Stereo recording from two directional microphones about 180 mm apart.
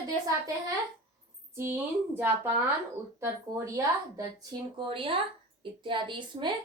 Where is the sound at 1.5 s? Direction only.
15° right (ahead or behind).